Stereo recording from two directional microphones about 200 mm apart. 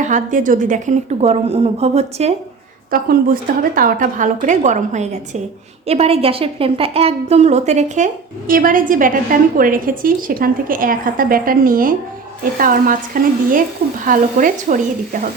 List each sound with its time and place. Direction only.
0.0 s a woman's voice: 40° right (ahead or behind)
2.9 s a woman's voice: 45° right (ahead or behind)
14.0 s a woman's voice: 40° right (ahead or behind)